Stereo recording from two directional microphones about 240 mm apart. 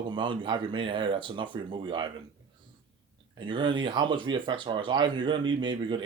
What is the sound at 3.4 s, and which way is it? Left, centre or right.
Speech, centre.